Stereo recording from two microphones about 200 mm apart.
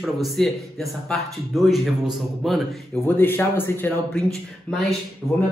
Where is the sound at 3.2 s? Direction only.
10° left (ahead or behind).